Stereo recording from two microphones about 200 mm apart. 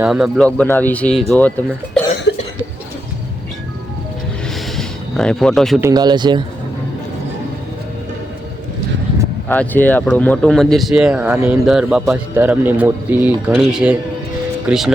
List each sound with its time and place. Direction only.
0.0 s speech: 5° right (ahead or behind)
2.3 s cough: 60° left (ahead or behind)
4.8 s speech: centre (ahead or behind)
5.8 s speech: 20° right (ahead or behind)
9.5 s speech: 10° left (ahead or behind)